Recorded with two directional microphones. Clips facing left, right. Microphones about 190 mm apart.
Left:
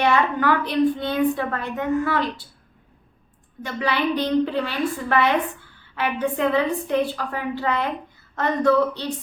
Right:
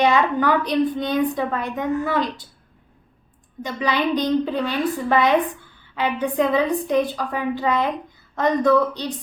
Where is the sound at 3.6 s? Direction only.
15° right (ahead or behind).